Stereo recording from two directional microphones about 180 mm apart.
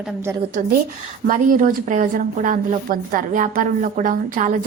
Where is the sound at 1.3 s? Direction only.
45° right (ahead or behind).